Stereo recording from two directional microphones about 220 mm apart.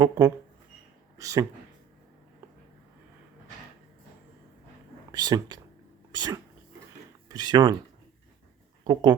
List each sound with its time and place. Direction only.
0.0 s speech: 20° right (ahead or behind)
5.1 s speech: 20° right (ahead or behind)
8.8 s speech: 20° right (ahead or behind)